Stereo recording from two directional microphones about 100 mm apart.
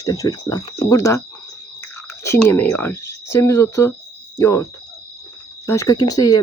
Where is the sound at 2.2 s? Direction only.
25° left (ahead or behind).